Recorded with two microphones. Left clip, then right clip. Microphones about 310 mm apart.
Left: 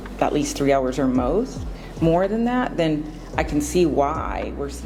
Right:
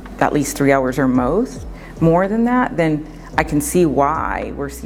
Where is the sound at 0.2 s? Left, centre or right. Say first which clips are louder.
Right 4 dB; right.